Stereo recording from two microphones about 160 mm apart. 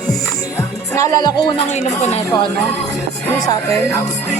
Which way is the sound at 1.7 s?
45° left (ahead or behind).